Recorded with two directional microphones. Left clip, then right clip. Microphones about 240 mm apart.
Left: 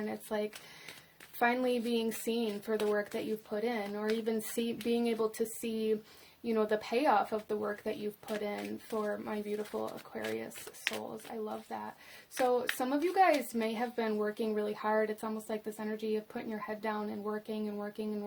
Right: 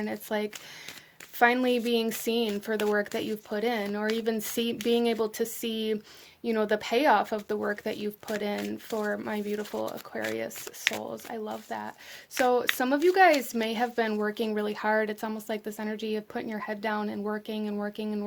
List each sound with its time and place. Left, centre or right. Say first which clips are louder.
0.0 s a woman's voice: right 5 dB; right